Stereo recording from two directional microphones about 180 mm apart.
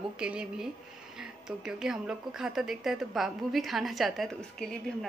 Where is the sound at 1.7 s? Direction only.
5° right (ahead or behind).